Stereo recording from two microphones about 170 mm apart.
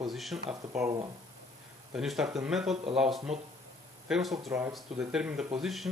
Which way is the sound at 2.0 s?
5° right (ahead or behind).